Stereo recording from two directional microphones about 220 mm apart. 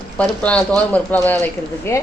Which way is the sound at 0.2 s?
5° left (ahead or behind).